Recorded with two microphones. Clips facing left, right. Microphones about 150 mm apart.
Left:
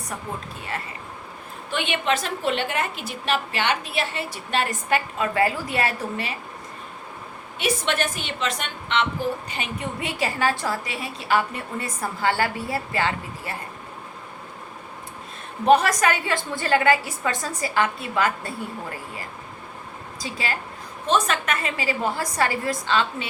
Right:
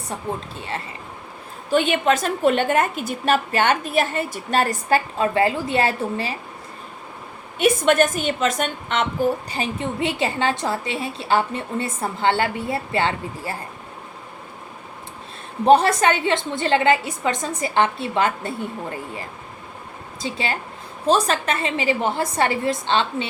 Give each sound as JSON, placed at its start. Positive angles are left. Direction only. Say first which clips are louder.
{"t": 1.7, "sound": "a woman's voice", "louder": "right 6 dB", "side_deg": -40}
{"t": 7.6, "sound": "a woman's voice", "louder": "right 8 dB", "side_deg": -45}
{"t": 9.5, "sound": "a woman's voice", "louder": "right 5 dB", "side_deg": -30}
{"t": 15.6, "sound": "a woman's voice", "louder": "right 3 dB", "side_deg": -30}